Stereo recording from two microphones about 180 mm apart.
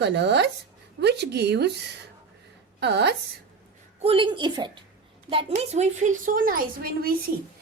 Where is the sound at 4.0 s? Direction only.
30° right (ahead or behind); by 7.1 s 55° right (ahead or behind).